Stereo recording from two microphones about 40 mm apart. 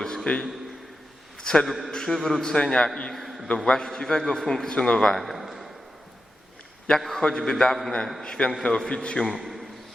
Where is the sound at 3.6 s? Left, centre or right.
Left.